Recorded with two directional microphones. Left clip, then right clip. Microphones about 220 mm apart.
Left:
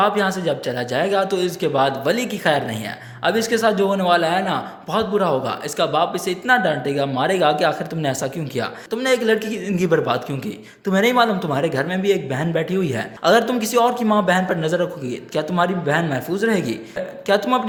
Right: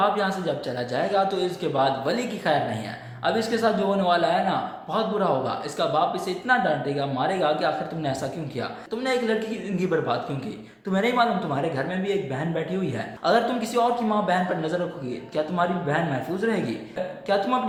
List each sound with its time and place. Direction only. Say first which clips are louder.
0.0 s a man's voice: left 5 dB; 50° left (ahead or behind)